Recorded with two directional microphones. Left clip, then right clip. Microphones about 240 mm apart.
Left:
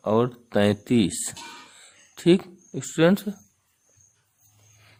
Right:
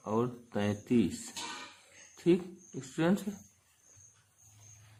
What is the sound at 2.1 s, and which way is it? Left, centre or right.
Speech, left.